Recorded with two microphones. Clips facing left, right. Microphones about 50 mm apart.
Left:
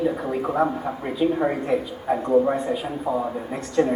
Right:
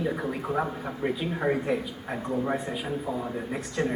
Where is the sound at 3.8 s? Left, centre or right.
Centre.